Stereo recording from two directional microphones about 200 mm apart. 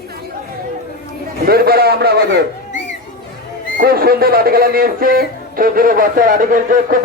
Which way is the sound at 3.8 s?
50° right (ahead or behind).